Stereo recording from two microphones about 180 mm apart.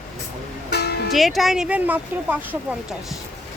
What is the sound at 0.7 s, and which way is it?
Music, 65° left (ahead or behind).